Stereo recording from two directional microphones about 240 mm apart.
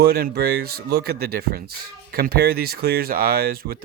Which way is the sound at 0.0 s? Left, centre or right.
Right.